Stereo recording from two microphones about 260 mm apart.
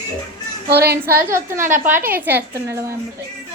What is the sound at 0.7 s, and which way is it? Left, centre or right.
Speech, right.